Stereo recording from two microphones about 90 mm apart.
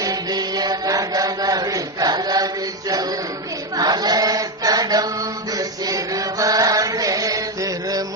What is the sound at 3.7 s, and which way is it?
Chant, 50° right (ahead or behind).